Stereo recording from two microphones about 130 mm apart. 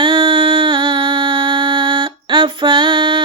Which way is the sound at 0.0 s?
40° right (ahead or behind).